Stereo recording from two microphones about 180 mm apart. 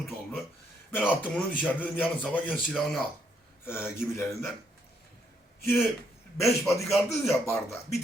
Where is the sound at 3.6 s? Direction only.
10° left (ahead or behind).